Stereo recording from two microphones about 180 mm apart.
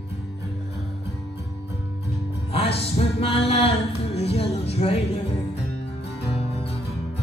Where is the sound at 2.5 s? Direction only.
35° left (ahead or behind).